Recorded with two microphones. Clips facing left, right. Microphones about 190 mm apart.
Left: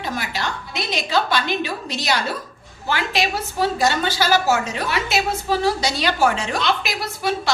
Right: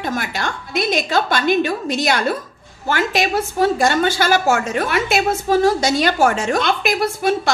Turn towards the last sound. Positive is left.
turn(degrees=-50)  # may be behind; listen again after turning